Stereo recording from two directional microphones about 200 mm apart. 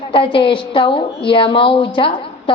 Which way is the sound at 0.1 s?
25° left (ahead or behind).